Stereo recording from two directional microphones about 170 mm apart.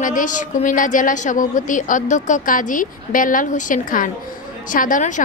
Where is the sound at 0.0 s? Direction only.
50° left (ahead or behind).